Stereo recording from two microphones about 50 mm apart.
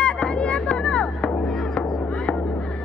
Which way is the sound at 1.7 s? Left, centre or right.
Centre.